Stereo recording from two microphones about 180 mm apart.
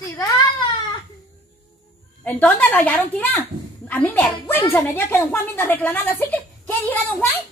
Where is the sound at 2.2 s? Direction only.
10° left (ahead or behind).